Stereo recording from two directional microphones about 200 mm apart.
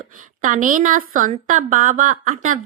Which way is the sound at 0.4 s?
40° right (ahead or behind).